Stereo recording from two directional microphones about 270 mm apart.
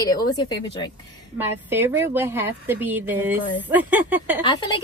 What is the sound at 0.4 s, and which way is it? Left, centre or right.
Speech, centre.